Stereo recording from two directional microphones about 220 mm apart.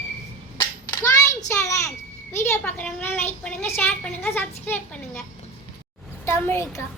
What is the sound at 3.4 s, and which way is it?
A child's voice, 5° left (ahead or behind).